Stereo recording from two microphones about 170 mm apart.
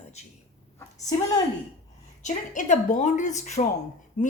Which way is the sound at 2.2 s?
45° left (ahead or behind).